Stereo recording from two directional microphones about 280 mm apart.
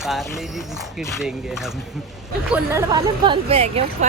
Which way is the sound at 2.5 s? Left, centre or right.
Centre.